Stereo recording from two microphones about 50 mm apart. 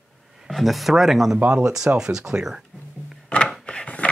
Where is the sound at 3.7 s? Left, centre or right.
Left.